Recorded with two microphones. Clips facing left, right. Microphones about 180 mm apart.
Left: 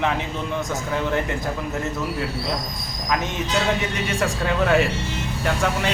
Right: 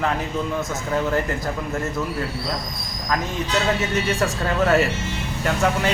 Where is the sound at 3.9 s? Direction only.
Centre (ahead or behind).